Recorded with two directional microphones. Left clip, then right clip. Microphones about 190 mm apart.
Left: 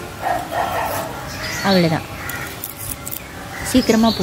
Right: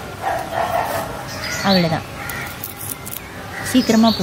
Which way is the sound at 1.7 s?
25° left (ahead or behind).